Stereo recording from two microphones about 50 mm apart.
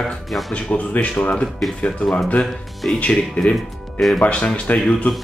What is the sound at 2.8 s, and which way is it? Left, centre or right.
Speech, centre.